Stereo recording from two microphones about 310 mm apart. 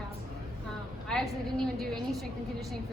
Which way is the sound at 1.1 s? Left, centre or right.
Centre.